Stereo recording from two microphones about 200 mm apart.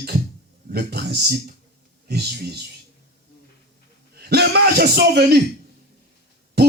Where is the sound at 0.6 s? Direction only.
55° right (ahead or behind).